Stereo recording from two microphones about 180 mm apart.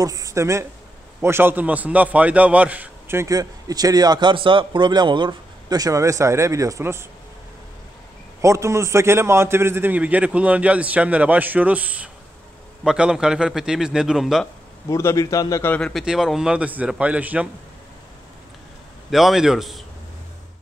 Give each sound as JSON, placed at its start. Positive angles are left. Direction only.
{"t": 0.0, "sound": "a man's voice", "side_deg": -20}
{"t": 8.4, "sound": "a man's voice", "side_deg": -15}
{"t": 14.9, "sound": "a man's voice", "side_deg": 15}
{"t": 19.0, "sound": "a man's voice", "side_deg": 0}